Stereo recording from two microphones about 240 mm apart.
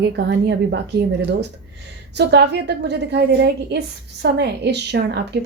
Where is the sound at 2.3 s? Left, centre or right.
Right.